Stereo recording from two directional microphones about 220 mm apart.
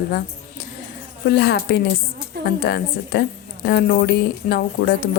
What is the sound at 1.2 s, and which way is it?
Speech, 45° left (ahead or behind).